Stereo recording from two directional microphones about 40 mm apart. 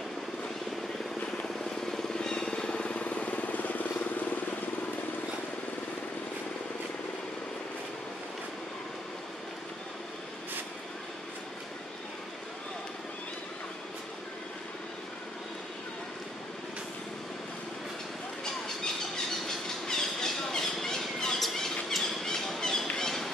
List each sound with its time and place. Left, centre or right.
1.9 s vehicle: centre
2.7 s vehicle: left
19.9 s a sound: centre